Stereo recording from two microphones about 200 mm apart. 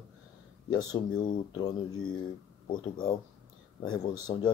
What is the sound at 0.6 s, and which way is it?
Speech, 20° left (ahead or behind).